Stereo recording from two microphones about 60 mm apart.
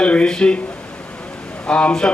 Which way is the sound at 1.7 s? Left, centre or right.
Centre.